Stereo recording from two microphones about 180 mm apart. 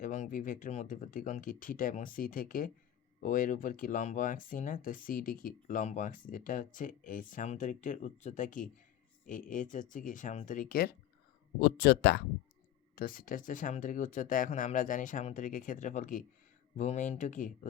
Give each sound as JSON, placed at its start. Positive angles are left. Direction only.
{"t": 0.0, "sound": "speech", "side_deg": 45}
{"t": 13.0, "sound": "speech", "side_deg": 50}